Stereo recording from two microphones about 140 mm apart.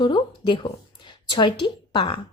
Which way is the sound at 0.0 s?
35° left (ahead or behind).